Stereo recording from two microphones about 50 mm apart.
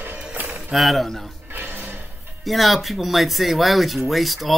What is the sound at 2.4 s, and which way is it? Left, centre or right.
Speech, centre.